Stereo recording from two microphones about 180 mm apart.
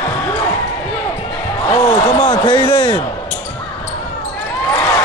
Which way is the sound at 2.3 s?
25° left (ahead or behind).